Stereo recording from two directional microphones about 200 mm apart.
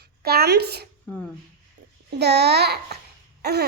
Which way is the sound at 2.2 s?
55° right (ahead or behind).